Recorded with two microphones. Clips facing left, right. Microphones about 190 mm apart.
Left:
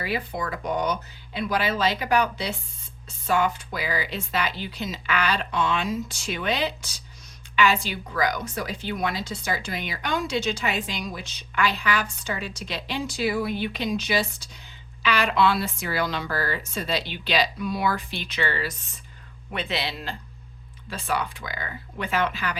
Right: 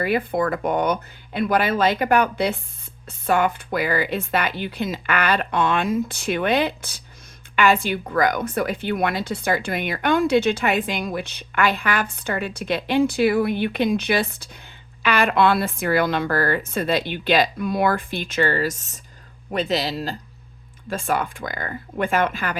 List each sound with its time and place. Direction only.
0.0 s a woman's voice: 55° right (ahead or behind)
20.9 s a woman's voice: 50° right (ahead or behind)